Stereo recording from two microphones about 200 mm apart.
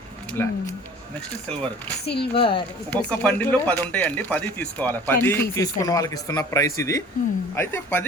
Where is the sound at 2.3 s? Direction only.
25° left (ahead or behind).